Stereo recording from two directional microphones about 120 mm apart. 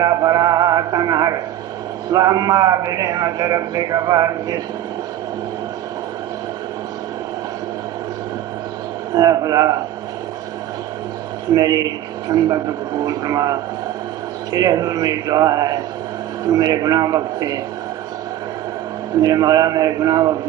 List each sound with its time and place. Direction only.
0.0 s music: 30° right (ahead or behind)
2.1 s a man's voice: 30° right (ahead or behind)
9.1 s a man's voice: 30° right (ahead or behind)
11.5 s a man's voice: 30° right (ahead or behind)
19.2 s a man's voice: 30° right (ahead or behind)